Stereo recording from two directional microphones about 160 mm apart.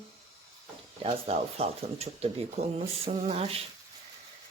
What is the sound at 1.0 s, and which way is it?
Speech, 40° right (ahead or behind).